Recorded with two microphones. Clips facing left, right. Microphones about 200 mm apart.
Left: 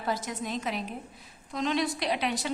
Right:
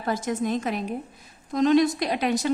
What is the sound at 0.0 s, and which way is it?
A woman's voice, 50° right (ahead or behind).